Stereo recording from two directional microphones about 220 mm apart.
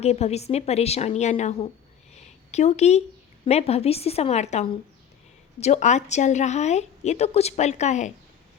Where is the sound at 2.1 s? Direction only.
30° left (ahead or behind).